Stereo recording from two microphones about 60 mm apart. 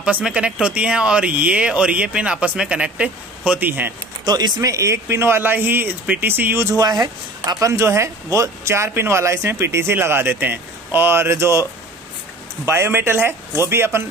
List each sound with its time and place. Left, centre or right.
0.0 s speech: centre
3.5 s speech: right
4.4 s speech: right
6.8 s speech: right
7.6 s speech: right
12.6 s speech: right